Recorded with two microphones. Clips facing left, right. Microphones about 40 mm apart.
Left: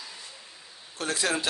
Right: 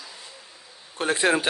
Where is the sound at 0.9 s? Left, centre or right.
Right.